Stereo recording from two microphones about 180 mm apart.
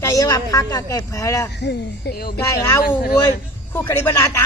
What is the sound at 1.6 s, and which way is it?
Speech, 65° left (ahead or behind).